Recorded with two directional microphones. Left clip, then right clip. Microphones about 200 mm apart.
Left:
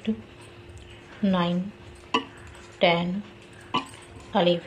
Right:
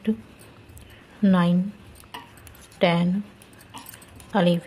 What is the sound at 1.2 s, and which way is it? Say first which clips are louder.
Speech: right 3 dB; 40° right (ahead or behind).